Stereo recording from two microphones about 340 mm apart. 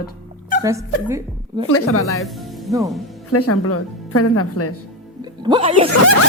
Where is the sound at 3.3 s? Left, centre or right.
Left.